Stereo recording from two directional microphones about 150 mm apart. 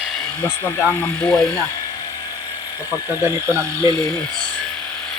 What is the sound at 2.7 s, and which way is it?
Speech, 25° left (ahead or behind).